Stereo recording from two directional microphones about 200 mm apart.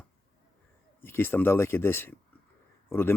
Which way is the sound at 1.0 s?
10° left (ahead or behind).